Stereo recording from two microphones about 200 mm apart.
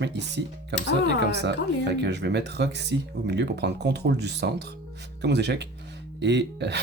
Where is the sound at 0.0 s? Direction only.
60° right (ahead or behind).